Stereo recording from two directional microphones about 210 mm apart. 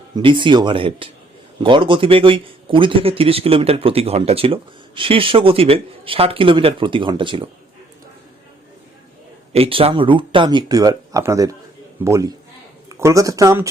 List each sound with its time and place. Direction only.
0.2 s speech: 25° right (ahead or behind)
9.5 s speech: 25° right (ahead or behind)